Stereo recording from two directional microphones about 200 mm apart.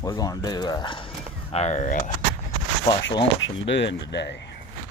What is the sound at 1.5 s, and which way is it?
Speech, 35° left (ahead or behind).